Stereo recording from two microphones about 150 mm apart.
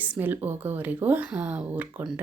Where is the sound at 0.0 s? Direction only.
10° right (ahead or behind).